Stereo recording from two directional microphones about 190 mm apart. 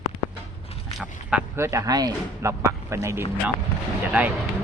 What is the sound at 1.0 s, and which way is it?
Speech, 5° right (ahead or behind).